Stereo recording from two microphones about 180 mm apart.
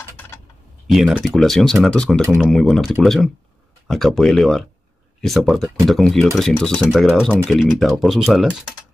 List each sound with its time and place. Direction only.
0.8 s speech: centre (ahead or behind)